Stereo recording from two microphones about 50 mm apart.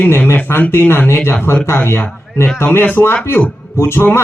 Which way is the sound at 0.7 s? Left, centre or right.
Left.